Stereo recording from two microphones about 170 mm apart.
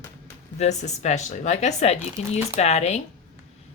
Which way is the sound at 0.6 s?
40° left (ahead or behind).